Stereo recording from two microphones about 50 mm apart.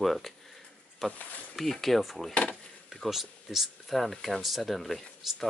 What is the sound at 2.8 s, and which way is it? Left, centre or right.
Speech, centre.